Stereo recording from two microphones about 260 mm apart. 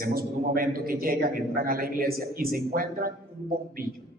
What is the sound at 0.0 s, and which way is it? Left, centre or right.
A man's voice, right.